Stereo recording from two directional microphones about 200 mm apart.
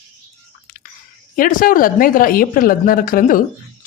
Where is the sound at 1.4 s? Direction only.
45° left (ahead or behind).